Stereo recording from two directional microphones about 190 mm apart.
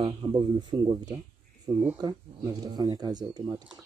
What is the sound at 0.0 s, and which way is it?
Speech, 20° right (ahead or behind).